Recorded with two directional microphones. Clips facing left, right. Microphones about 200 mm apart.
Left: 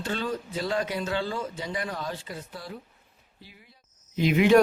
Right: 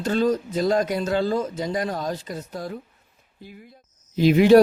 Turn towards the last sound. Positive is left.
turn(degrees=-35)  # may be behind; listen again after turning